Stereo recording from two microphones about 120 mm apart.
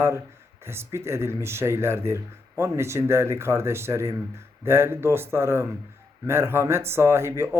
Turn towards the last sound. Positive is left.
turn(degrees=-20)  # may be behind; listen again after turning